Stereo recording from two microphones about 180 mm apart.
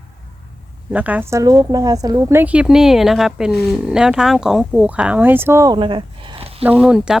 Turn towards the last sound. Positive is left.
turn(degrees=-5)  # may be behind; listen again after turning